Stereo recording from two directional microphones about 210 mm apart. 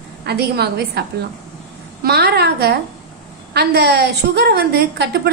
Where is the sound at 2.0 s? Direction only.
50° right (ahead or behind).